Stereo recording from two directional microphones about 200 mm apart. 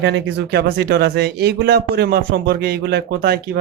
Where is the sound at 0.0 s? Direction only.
60° right (ahead or behind).